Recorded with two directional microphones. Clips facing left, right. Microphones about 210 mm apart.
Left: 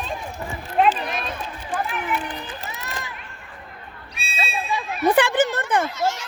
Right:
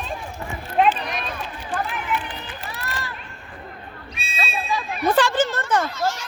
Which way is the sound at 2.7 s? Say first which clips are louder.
Right 1 dB; 20° left (ahead or behind).